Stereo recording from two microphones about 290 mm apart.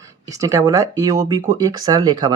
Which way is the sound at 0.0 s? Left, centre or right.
Centre.